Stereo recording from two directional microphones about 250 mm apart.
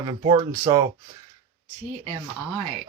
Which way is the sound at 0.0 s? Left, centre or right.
Centre.